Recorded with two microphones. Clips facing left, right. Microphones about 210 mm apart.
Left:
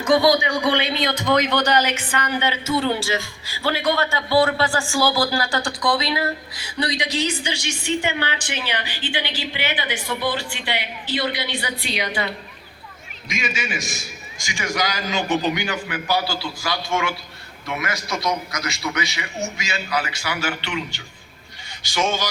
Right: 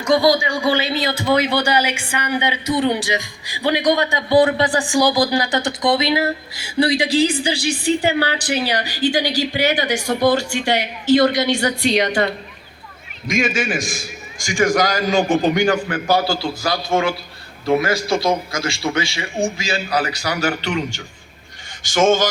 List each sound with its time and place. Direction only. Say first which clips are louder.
0.0 s a man's voice: right 1 dB; centre (ahead or behind); by 13.8 s 50° right (ahead or behind)
13.8 s a sound: right 5 dB; centre (ahead or behind)
14.4 s a man's voice: right 9 dB; 50° right (ahead or behind)